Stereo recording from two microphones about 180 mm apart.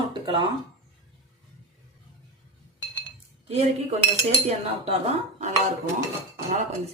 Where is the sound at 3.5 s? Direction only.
35° right (ahead or behind).